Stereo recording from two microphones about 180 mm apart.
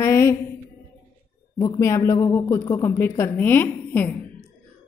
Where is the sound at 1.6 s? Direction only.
15° left (ahead or behind).